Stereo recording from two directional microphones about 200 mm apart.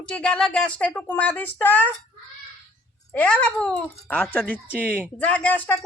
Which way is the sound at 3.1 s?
5° left (ahead or behind).